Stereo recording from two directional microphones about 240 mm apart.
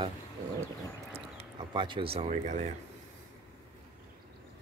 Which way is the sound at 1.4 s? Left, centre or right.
Centre.